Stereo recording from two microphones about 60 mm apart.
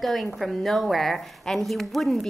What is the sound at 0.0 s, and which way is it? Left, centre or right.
A woman's voice, centre.